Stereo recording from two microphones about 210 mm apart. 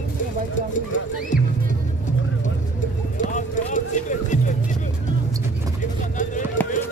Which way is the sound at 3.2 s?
35° left (ahead or behind).